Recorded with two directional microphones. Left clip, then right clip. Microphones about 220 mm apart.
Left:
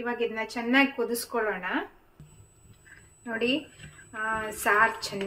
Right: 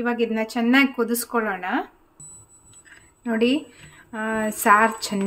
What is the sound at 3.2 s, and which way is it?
A woman's voice, 55° right (ahead or behind).